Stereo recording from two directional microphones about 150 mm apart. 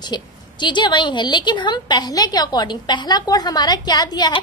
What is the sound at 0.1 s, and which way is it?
A woman's voice, 30° left (ahead or behind).